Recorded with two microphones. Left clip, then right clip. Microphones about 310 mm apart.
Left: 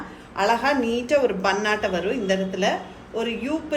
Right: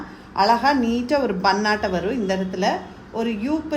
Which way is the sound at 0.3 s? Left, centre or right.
Right.